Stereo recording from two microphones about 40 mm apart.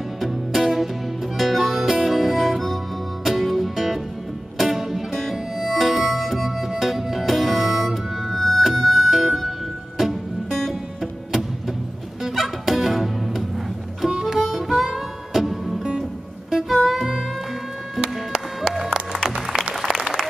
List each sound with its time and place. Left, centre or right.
0.2 s music: centre
12.2 s fowl: centre
14.3 s music: centre
18.0 s music: centre
19.8 s applause: centre